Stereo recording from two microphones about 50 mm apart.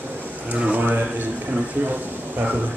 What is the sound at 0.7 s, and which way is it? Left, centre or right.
Speech, right.